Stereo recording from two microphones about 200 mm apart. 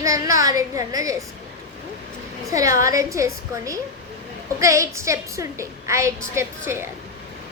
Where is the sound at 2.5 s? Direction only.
15° right (ahead or behind).